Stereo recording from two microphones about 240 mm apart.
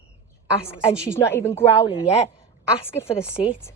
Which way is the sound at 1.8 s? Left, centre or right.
Left.